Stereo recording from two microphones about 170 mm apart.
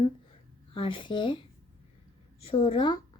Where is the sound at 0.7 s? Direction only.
30° left (ahead or behind).